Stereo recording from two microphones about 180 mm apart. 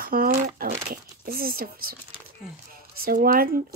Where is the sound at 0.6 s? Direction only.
40° right (ahead or behind).